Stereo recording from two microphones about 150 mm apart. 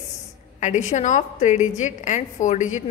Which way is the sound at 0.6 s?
55° left (ahead or behind).